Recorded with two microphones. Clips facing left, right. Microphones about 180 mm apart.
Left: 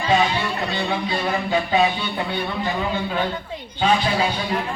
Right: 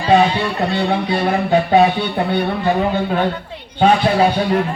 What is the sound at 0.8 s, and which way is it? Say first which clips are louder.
A man's voice: right 6 dB; 65° right (ahead or behind).